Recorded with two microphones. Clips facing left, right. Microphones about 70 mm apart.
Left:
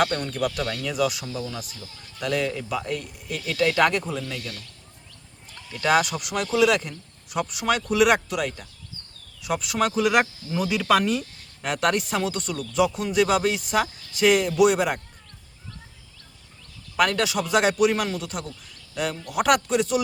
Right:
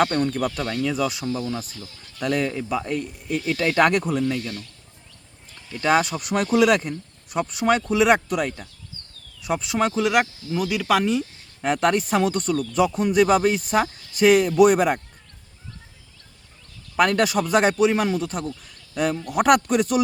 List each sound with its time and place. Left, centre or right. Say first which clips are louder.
0.0 s speech: right 3 dB; right
2.5 s speech: right 2 dB; right
4.2 s speech: right 8 dB; right
5.7 s speech: right 1 dB; right
7.3 s speech: right 4 dB; right
10.2 s speech: right 1 dB; centre
11.6 s speech: right 3 dB; right
17.0 s speech: right 3 dB; right